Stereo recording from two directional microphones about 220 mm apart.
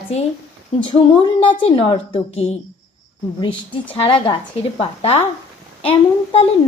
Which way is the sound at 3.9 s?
25° left (ahead or behind).